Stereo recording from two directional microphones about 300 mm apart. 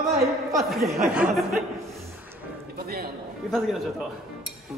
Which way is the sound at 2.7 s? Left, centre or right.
Right.